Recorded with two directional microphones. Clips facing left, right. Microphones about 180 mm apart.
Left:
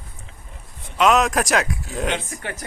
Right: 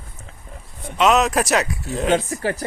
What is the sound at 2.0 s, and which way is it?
Speech, 40° right (ahead or behind).